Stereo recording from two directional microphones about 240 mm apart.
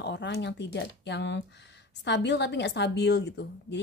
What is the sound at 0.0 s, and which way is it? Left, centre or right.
Speech, left.